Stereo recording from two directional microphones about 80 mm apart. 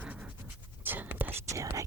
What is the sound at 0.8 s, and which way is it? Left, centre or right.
Whispering, right.